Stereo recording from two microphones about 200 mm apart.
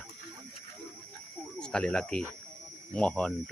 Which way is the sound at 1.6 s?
5° left (ahead or behind).